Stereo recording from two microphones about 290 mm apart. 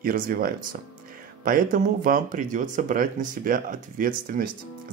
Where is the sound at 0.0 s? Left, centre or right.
Right.